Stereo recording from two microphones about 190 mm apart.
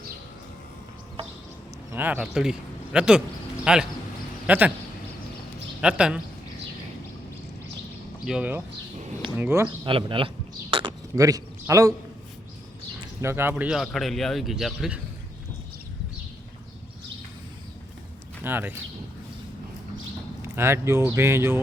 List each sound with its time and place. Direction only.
1.9 s a man's voice: 10° right (ahead or behind)
5.8 s a man's voice: 5° right (ahead or behind)
8.2 s a man's voice: 5° right (ahead or behind)
9.6 s a sound: 25° right (ahead or behind)
13.2 s a man's voice: 10° right (ahead or behind)
18.4 s speech: 10° right (ahead or behind)
20.4 s speech: 15° right (ahead or behind)